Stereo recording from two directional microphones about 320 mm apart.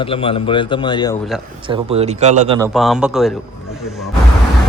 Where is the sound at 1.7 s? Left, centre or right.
Centre.